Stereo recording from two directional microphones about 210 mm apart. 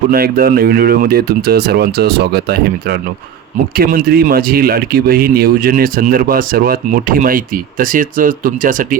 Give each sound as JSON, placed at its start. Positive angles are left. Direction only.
{"t": 0.1, "sound": "speech", "side_deg": -45}